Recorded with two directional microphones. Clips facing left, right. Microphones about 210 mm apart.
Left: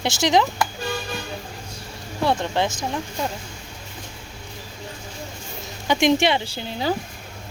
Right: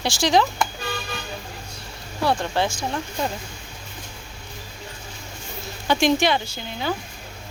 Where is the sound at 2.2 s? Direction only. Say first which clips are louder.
Left 1 dB; 20° left (ahead or behind).